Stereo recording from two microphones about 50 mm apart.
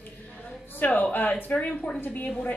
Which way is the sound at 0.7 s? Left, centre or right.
Left.